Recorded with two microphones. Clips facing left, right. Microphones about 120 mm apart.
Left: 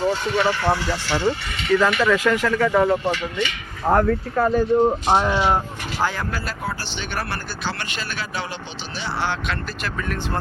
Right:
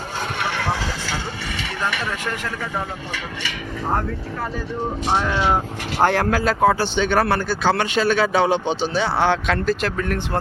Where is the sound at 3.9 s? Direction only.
60° left (ahead or behind).